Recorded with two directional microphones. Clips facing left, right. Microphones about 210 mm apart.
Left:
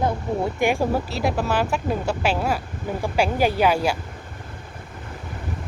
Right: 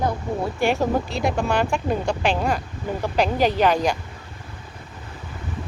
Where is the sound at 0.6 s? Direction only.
15° left (ahead or behind).